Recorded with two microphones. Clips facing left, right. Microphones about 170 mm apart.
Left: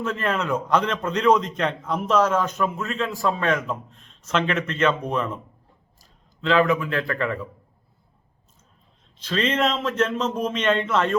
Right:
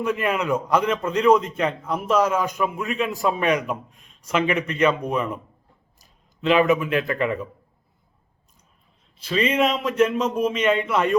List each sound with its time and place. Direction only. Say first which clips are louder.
0.0 s a man's voice: right 2 dB; 15° right (ahead or behind)
6.0 s speech: right 4 dB; 20° right (ahead or behind)
9.1 s a man's voice: right 2 dB; 10° right (ahead or behind)